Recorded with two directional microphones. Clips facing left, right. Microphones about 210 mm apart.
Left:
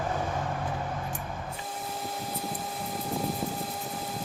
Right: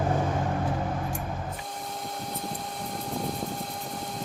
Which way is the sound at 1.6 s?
5° left (ahead or behind).